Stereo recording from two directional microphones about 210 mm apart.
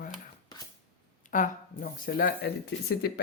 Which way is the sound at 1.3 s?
40° left (ahead or behind).